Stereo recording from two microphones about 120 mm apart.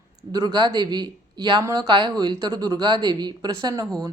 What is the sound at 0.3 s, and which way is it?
A woman's voice, 35° right (ahead or behind).